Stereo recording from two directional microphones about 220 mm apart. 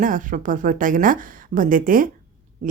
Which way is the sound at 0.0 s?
35° right (ahead or behind).